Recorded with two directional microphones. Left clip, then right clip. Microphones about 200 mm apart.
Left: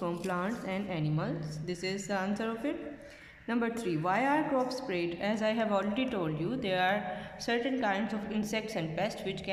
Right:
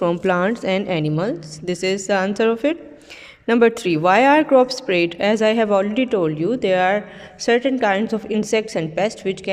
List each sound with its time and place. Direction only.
0.0 s a woman's voice: 45° right (ahead or behind)